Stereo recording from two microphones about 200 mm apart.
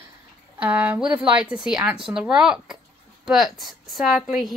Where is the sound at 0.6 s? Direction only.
10° right (ahead or behind).